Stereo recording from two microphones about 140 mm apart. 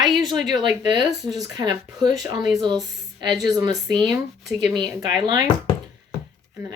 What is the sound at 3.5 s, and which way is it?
Speech, 30° right (ahead or behind).